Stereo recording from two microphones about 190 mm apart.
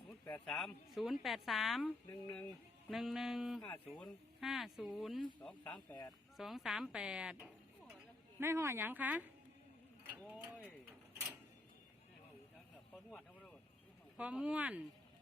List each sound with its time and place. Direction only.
0.3 s a woman's voice: 5° left (ahead or behind)
10.3 s mechanisms: 5° right (ahead or behind)
13.1 s vehicle: 5° left (ahead or behind)
14.2 s speech: 5° right (ahead or behind)